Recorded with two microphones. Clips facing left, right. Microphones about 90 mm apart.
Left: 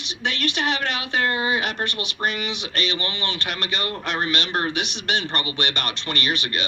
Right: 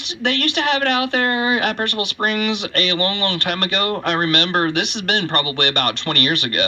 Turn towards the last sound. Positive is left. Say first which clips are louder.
# right 5 dB
turn(degrees=-50)  # may be behind; listen again after turning